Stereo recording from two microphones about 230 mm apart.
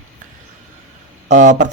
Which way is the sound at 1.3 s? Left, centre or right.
Right.